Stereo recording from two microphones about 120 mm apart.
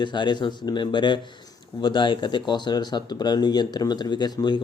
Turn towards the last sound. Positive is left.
turn(degrees=35)  # may be behind; listen again after turning